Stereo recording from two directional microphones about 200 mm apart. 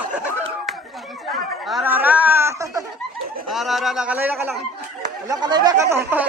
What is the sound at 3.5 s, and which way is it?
Speech, centre (ahead or behind).